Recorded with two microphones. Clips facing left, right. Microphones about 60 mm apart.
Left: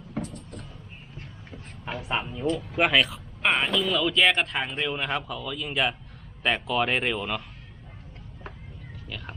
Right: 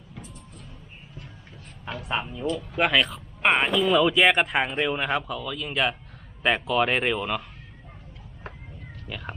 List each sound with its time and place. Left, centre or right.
0.1 s a sound: left
2.0 s speech: centre
3.4 s speech: centre
9.0 s speech: centre